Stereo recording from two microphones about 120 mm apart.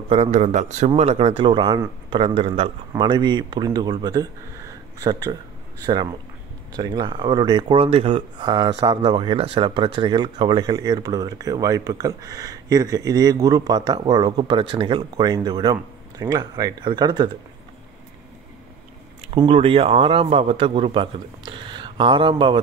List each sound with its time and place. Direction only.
0.1 s a man's voice: 70° right (ahead or behind); by 2.7 s 55° right (ahead or behind)
3.0 s speech: 40° right (ahead or behind)
6.8 s speech: 40° right (ahead or behind)
7.8 s speech: 55° right (ahead or behind)
8.4 s speech: 35° right (ahead or behind)
19.3 s a man's voice: 45° right (ahead or behind)